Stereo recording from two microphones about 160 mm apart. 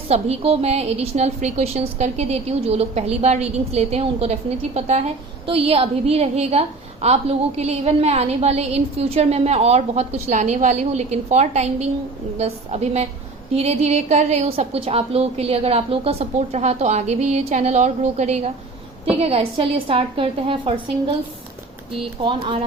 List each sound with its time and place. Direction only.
0.1 s a woman's voice: 40° right (ahead or behind)
22.2 s a woman's voice: 30° right (ahead or behind)